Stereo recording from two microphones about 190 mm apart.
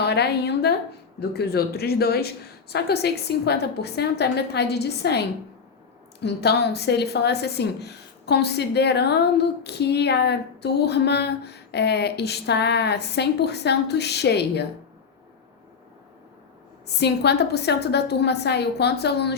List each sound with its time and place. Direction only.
0.0 s a woman's voice: 60° left (ahead or behind)
16.8 s a woman's voice: 60° left (ahead or behind)